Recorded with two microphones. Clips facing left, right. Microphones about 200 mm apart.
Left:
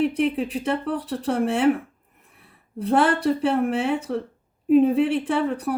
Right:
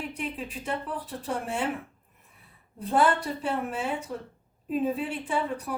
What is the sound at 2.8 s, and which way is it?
Speech, 75° left (ahead or behind).